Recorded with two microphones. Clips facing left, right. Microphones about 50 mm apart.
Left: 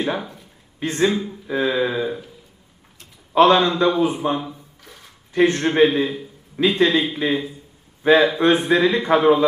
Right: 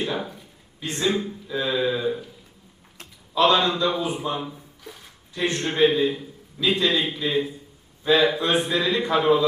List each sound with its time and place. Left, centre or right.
0.8 s speech: left
3.3 s speech: left